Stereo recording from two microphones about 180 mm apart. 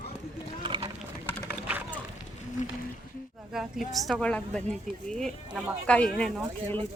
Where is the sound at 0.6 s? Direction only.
25° right (ahead or behind).